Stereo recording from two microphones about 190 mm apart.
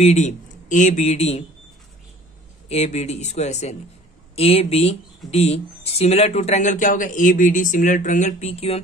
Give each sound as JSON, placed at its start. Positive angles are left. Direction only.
{"t": 0.0, "sound": "speech", "side_deg": 40}
{"t": 2.7, "sound": "speech", "side_deg": 35}